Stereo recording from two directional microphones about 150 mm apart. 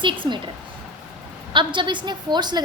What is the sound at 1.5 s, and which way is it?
A woman's voice, 30° right (ahead or behind).